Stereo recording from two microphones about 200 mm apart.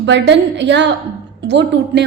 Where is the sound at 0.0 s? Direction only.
60° right (ahead or behind).